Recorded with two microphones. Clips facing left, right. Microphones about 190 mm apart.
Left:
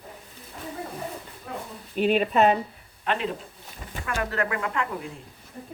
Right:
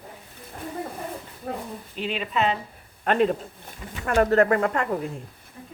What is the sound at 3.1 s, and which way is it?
Speech, 45° right (ahead or behind).